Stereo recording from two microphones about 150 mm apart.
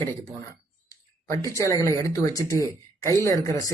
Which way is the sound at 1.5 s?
20° left (ahead or behind).